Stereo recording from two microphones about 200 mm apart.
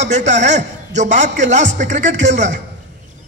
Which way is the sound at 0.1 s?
35° right (ahead or behind).